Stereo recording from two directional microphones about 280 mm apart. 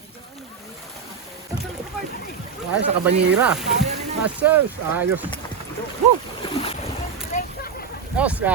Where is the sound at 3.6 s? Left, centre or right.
Right.